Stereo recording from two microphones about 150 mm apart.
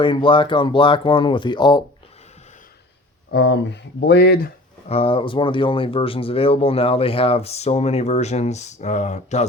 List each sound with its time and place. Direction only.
0.0 s speech: 35° left (ahead or behind)
4.0 s speech: 90° left
4.9 s speech: 40° left (ahead or behind)